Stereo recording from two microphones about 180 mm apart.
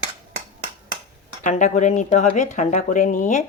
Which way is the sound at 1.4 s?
40° left (ahead or behind).